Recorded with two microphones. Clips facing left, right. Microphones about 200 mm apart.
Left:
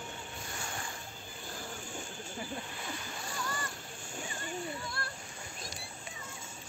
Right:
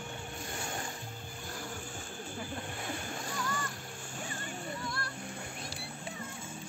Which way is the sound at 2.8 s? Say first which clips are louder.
Right 3 dB; 55° right (ahead or behind).